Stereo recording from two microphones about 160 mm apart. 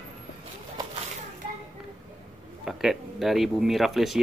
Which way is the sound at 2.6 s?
Centre (ahead or behind).